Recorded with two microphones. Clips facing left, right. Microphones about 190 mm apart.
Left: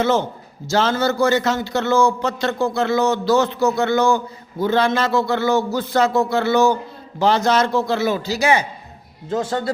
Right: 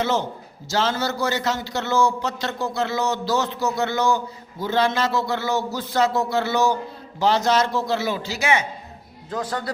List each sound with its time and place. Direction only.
0.7 s a man's voice: 55° left (ahead or behind); by 8.6 s 35° left (ahead or behind)
9.3 s a man's voice: 25° left (ahead or behind)